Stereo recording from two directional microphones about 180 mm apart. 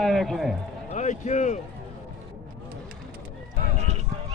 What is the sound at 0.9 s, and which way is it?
Speech, 40° left (ahead or behind).